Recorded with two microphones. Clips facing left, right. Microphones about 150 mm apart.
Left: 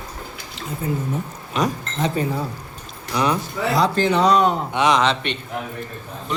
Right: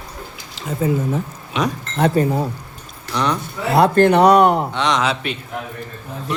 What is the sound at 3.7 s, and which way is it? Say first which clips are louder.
Speech: right 6 dB; 60° right (ahead or behind).